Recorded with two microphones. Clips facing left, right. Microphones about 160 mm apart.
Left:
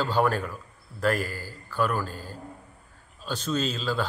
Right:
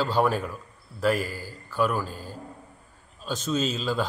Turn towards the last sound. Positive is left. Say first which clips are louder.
# right 1 dB
turn(degrees=-10)  # may be behind; listen again after turning